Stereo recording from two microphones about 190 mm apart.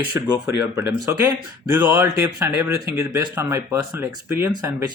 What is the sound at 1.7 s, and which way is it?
Speech, 10° right (ahead or behind).